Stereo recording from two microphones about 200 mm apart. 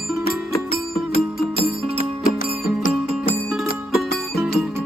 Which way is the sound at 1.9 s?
40° left (ahead or behind).